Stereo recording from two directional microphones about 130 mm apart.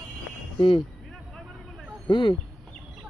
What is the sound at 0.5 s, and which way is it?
Speech, 40° left (ahead or behind).